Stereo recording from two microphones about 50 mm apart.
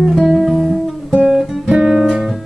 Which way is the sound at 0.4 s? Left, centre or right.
Centre.